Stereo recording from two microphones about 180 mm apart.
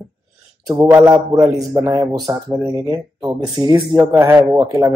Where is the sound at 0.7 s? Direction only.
15° right (ahead or behind).